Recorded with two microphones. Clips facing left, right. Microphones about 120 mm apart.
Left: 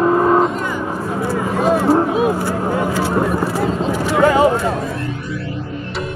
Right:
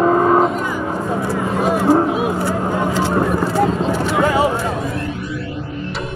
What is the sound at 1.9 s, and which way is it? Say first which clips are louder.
Vehicle: even; 20° right (ahead or behind).